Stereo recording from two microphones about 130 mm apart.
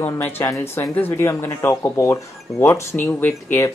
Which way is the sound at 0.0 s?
20° left (ahead or behind).